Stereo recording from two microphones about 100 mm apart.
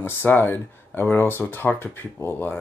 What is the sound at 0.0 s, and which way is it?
Speech, 20° left (ahead or behind).